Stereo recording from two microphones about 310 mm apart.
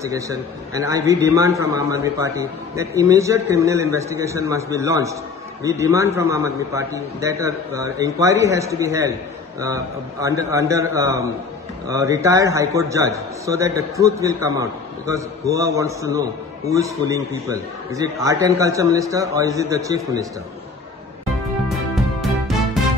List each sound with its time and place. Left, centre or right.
0.0 s a man's voice: centre
10.2 s a man's voice: centre